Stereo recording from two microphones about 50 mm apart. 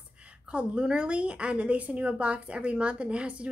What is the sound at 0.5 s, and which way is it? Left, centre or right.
A woman's voice, centre.